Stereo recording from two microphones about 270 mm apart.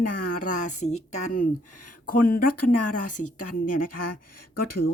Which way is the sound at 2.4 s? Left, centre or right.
Left.